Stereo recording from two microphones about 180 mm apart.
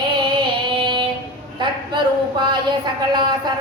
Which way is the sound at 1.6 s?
25° right (ahead or behind).